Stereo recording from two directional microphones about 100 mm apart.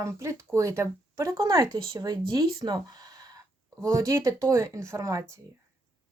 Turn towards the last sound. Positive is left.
turn(degrees=-30)  # may be behind; listen again after turning